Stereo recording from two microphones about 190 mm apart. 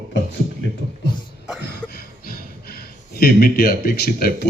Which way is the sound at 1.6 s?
55° left (ahead or behind).